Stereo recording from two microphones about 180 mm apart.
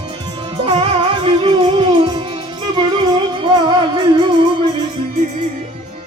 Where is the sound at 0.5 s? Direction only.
30° right (ahead or behind).